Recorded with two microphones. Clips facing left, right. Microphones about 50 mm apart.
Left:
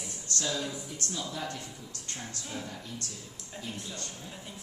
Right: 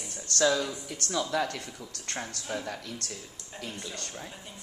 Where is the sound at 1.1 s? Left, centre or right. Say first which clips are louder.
Right 10 dB; right.